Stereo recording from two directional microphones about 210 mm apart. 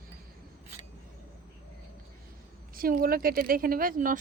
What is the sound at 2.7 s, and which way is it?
Speech, 45° right (ahead or behind).